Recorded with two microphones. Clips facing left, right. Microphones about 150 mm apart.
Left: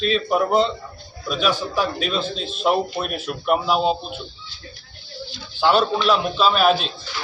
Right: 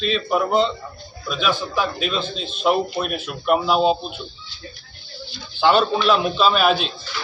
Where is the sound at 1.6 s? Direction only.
40° left (ahead or behind).